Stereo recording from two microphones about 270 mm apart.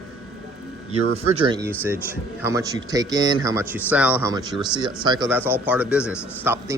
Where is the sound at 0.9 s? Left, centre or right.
Centre.